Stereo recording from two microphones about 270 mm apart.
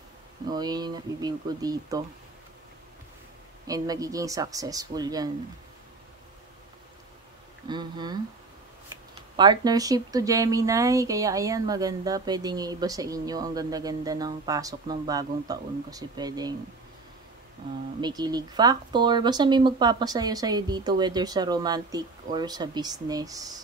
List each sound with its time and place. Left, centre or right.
0.5 s a woman's voice: centre
3.6 s a woman's voice: centre
7.6 s a woman's voice: centre
9.4 s a woman's voice: centre
18.0 s a woman's voice: centre